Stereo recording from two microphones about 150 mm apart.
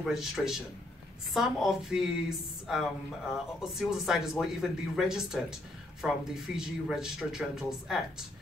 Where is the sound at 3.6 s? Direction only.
5° right (ahead or behind).